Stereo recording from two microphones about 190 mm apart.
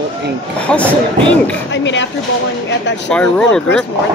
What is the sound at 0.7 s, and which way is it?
Speech, 5° left (ahead or behind).